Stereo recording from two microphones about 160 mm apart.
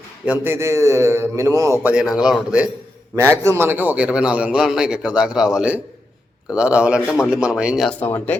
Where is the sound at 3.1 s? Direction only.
15° right (ahead or behind).